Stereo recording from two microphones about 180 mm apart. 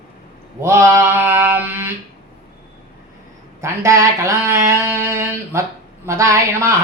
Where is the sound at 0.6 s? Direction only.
15° right (ahead or behind).